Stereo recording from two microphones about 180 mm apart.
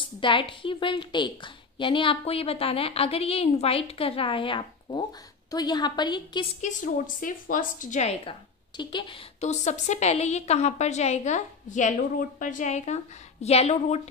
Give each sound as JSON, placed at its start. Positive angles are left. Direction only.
{"t": 0.0, "sound": "a woman's voice", "side_deg": 30}
{"t": 6.6, "sound": "a woman's voice", "side_deg": 45}
{"t": 9.4, "sound": "a woman's voice", "side_deg": 40}